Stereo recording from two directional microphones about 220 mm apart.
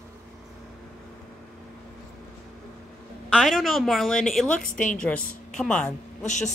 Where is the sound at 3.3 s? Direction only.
Centre (ahead or behind).